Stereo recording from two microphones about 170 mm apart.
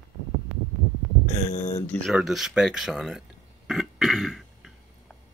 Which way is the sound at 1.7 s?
15° left (ahead or behind).